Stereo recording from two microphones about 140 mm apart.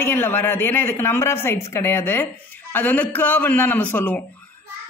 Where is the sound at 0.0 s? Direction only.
15° left (ahead or behind).